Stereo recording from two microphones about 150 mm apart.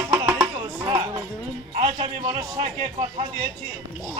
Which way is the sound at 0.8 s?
30° right (ahead or behind).